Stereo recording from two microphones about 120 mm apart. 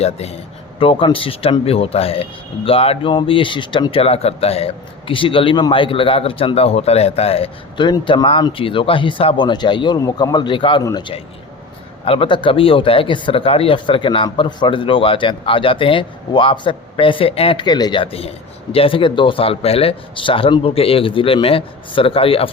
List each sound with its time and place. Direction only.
0.0 s a man's voice: 60° left (ahead or behind)
0.8 s speech: 45° left (ahead or behind)
7.9 s speech: 40° left (ahead or behind)
12.0 s speech: 50° left (ahead or behind)
18.0 s speech: 55° left (ahead or behind)